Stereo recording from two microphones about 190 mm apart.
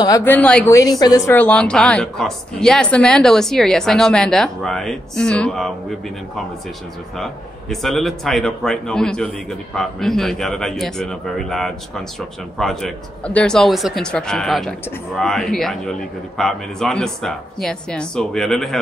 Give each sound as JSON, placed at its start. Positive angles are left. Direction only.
{"t": 0.0, "sound": "a woman's voice", "side_deg": 15}
{"t": 7.7, "sound": "a woman's voice", "side_deg": 0}